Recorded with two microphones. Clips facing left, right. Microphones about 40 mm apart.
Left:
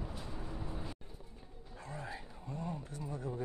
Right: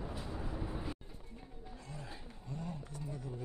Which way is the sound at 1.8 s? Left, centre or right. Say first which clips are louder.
Left 6 dB; left.